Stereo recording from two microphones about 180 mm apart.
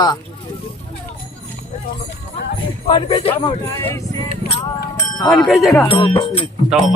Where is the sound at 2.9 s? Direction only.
30° left (ahead or behind).